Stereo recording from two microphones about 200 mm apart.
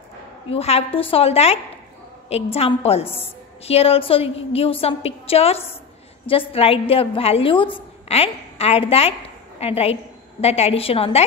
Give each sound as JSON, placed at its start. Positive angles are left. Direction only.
{"t": 0.5, "sound": "a woman's voice", "side_deg": 30}